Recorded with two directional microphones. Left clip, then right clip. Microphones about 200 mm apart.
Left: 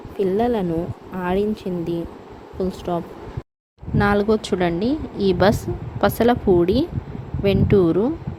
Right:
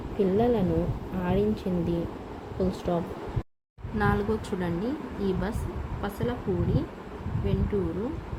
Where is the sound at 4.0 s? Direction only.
40° left (ahead or behind).